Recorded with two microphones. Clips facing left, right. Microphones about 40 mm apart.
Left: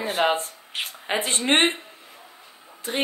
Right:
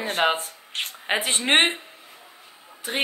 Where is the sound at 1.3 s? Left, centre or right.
Centre.